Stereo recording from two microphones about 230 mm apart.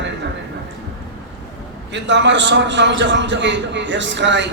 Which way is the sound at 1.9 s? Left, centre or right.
Right.